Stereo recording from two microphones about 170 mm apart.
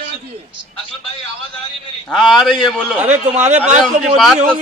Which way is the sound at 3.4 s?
45° right (ahead or behind).